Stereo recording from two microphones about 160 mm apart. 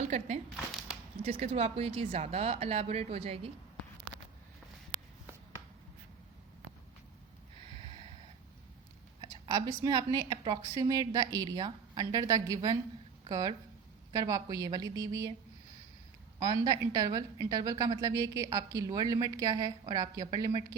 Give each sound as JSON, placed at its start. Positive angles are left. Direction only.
{"t": 0.5, "sound": "a sound", "side_deg": 0}
{"t": 1.2, "sound": "speech", "side_deg": -40}
{"t": 9.2, "sound": "a woman's voice", "side_deg": -25}
{"t": 16.4, "sound": "a woman's voice", "side_deg": -25}